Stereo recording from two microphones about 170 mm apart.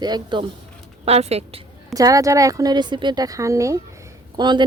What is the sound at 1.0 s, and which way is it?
Speech, 40° right (ahead or behind).